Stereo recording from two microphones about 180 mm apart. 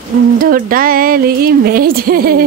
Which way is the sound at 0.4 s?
50° right (ahead or behind).